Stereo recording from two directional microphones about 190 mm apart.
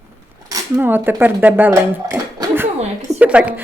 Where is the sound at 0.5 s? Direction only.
10° right (ahead or behind).